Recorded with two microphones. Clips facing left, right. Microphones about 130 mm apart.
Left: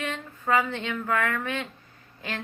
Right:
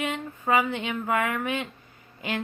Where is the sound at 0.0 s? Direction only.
15° right (ahead or behind).